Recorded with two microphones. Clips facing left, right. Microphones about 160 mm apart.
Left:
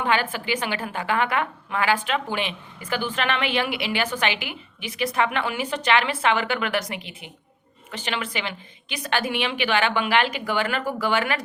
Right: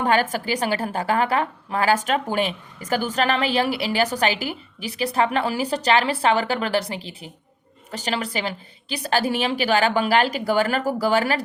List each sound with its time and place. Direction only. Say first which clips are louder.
0.0 s a woman's voice: right 3 dB; 40° right (ahead or behind)